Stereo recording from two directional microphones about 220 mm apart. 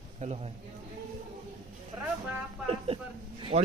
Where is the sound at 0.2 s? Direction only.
25° right (ahead or behind).